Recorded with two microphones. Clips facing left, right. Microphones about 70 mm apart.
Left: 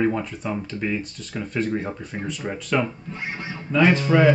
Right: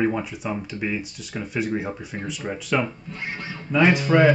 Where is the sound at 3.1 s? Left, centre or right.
Centre.